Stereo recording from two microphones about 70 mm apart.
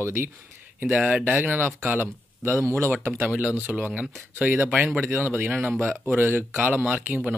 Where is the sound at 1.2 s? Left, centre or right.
Right.